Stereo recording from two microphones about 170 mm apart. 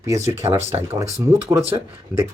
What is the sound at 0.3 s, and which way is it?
Speech, 40° right (ahead or behind).